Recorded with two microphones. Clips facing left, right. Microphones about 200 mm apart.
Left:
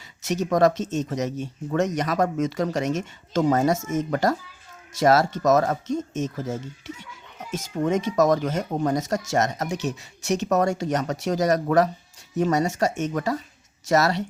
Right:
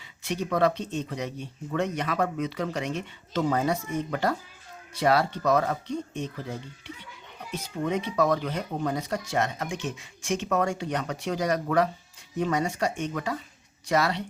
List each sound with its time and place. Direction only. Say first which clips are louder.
0.3 s speech: left 5 dB; 40° left (ahead or behind)